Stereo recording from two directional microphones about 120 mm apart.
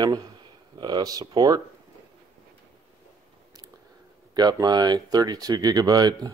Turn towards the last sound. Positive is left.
turn(degrees=-35)  # may be behind; listen again after turning